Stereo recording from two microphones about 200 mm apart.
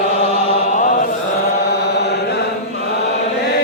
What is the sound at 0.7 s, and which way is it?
Mantra, 40° left (ahead or behind).